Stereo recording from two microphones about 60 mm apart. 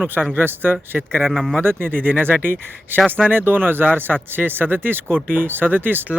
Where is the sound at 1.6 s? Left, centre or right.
Right.